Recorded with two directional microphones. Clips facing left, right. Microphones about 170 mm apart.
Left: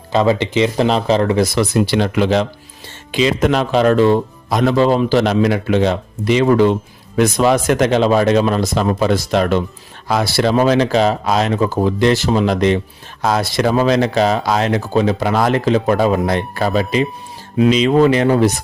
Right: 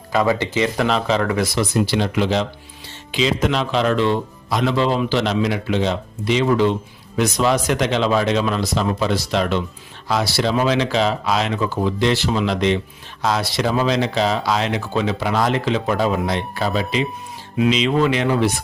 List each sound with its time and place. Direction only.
0.1 s speech: 25° left (ahead or behind)
0.9 s speech: 35° left (ahead or behind)
1.5 s speech: 65° left (ahead or behind); by 18.5 s 40° left (ahead or behind)